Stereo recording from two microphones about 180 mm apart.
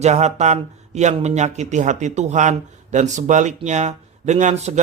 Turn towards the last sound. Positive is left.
turn(degrees=-35)  # may be behind; listen again after turning